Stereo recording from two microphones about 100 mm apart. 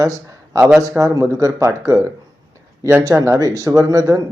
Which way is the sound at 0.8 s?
35° right (ahead or behind).